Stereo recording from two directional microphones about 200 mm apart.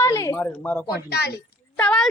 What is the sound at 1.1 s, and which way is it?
Speech, 55° left (ahead or behind).